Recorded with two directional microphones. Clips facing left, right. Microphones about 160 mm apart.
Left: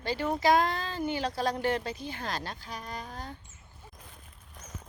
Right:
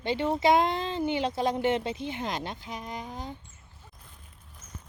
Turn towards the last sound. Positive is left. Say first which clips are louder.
# right 3 dB
turn(degrees=-20)  # may be behind; listen again after turning